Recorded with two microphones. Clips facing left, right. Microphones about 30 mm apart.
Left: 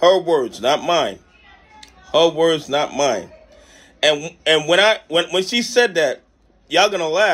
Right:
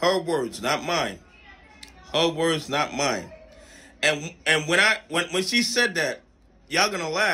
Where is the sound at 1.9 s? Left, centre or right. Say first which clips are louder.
Left 8 dB; right.